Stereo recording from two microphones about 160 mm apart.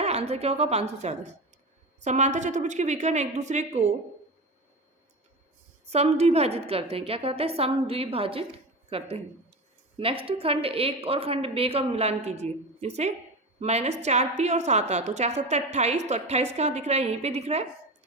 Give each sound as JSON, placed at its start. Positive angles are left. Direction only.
{"t": 0.0, "sound": "a woman's voice", "side_deg": -40}
{"t": 5.9, "sound": "a woman's voice", "side_deg": -40}